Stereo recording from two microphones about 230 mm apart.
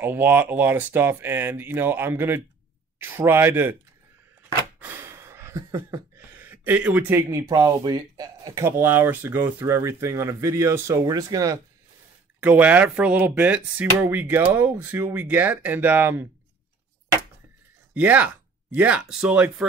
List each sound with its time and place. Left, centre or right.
0.0 s speech: centre
4.4 s a sound: centre
12.4 s speech: centre
17.9 s speech: centre